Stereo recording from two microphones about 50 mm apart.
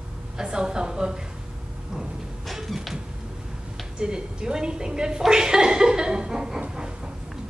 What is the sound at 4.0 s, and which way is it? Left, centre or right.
A woman's voice, centre.